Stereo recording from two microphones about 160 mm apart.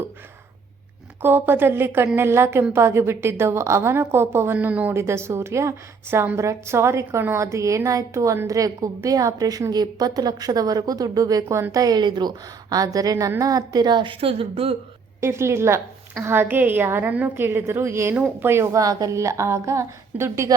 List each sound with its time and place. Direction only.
1.2 s a woman's voice: 15° right (ahead or behind); by 14.8 s 35° right (ahead or behind)
15.2 s a woman's voice: 15° right (ahead or behind)